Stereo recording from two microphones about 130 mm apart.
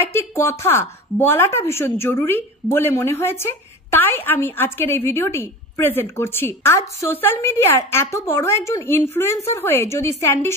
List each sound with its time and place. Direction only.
0.0 s a woman's voice: 20° left (ahead or behind)